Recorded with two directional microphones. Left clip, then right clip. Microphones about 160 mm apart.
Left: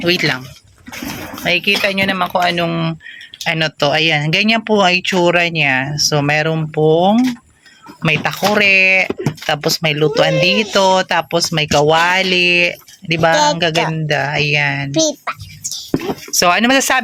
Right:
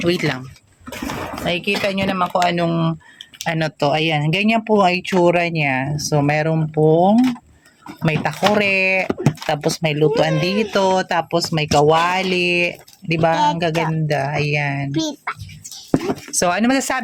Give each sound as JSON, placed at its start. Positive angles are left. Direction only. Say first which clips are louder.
{"t": 0.0, "sound": "speech", "louder": "left 5 dB", "side_deg": -5}
{"t": 1.5, "sound": "speech", "louder": "left 6 dB", "side_deg": 0}
{"t": 13.3, "sound": "speech", "louder": "left 5 dB", "side_deg": 55}
{"t": 13.9, "sound": "speech", "louder": "left 4 dB", "side_deg": -5}
{"t": 14.9, "sound": "a sound", "louder": "left 7 dB", "side_deg": 65}
{"t": 16.0, "sound": "speech", "louder": "left 8 dB", "side_deg": 0}